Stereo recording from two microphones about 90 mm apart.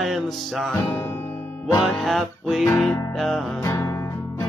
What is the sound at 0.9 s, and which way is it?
Guitar, 25° left (ahead or behind).